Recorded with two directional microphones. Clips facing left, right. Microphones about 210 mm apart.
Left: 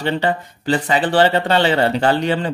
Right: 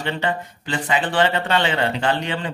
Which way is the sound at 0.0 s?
35° left (ahead or behind).